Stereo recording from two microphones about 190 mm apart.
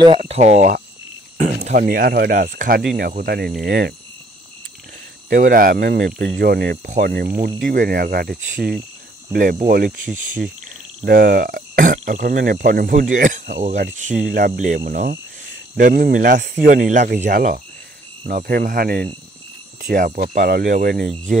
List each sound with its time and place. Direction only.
0.0 s speech: 30° right (ahead or behind); by 3.5 s 50° right (ahead or behind)
3.6 s cricket: 55° right (ahead or behind)
5.3 s speech: 45° right (ahead or behind)
8.5 s cricket: centre (ahead or behind)
9.3 s speech: 45° right (ahead or behind)
11.1 s speech: 45° right (ahead or behind)
14.3 s speech: 50° right (ahead or behind)